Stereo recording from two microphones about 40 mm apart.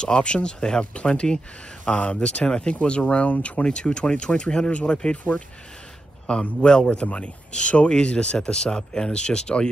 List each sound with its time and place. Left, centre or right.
0.0 s speech: left
2.7 s speech: left
3.6 s speech: left
5.3 s speech: left
6.3 s speech: left